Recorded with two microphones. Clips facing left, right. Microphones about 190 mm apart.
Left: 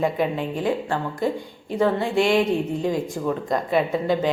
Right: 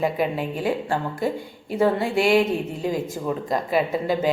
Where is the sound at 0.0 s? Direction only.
5° right (ahead or behind).